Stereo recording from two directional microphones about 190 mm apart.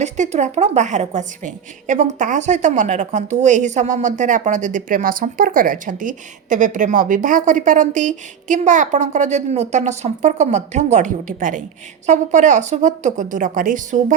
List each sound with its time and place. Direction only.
0.0 s a woman's voice: 35° right (ahead or behind)